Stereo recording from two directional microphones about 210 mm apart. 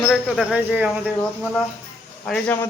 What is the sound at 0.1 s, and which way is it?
A man's voice, centre (ahead or behind).